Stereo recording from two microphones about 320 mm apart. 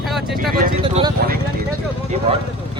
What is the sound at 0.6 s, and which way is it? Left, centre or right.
Speech, centre.